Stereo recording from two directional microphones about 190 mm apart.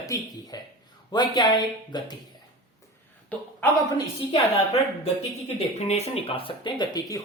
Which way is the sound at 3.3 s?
10° left (ahead or behind).